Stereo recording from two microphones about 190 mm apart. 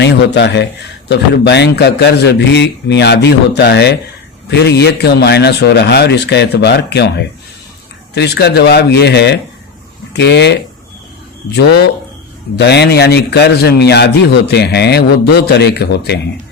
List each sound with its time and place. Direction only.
0.0 s a man's voice: 65° left (ahead or behind)